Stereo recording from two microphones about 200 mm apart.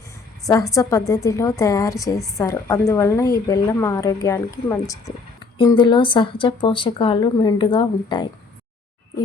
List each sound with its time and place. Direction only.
0.4 s a woman's voice: 15° left (ahead or behind)